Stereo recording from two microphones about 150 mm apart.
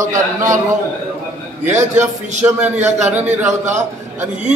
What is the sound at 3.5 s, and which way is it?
Speech, 55° right (ahead or behind).